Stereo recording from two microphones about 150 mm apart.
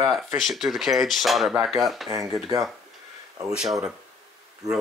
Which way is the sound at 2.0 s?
20° right (ahead or behind).